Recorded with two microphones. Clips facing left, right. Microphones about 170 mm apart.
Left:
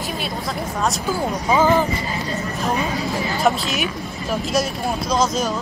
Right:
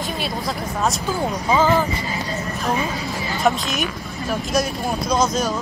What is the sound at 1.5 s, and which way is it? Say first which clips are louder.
Speech: left 1 dB; 10° left (ahead or behind).